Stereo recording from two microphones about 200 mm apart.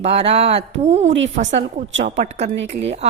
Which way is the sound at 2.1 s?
35° right (ahead or behind).